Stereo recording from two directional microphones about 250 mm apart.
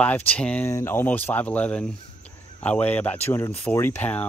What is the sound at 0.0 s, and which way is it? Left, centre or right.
Speech, centre.